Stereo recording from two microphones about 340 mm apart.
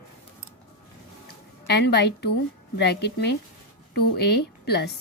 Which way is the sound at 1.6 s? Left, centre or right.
Left.